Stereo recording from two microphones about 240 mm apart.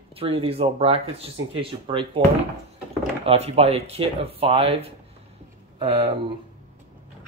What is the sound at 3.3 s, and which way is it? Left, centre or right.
Speech, right.